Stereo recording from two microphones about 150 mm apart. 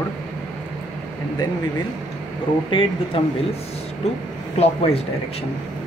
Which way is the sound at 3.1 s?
35° left (ahead or behind).